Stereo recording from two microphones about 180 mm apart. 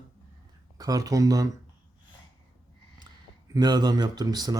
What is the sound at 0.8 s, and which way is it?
Speech, 20° right (ahead or behind).